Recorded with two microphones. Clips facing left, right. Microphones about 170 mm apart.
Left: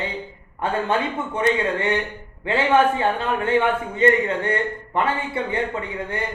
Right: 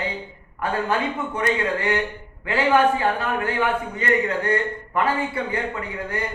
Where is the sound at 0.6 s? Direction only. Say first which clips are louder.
Left 1 dB; 25° left (ahead or behind).